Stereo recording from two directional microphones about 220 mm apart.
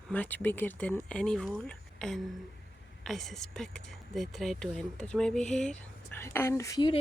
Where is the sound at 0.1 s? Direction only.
5° left (ahead or behind).